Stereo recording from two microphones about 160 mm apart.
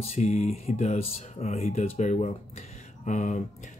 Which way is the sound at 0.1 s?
40° left (ahead or behind).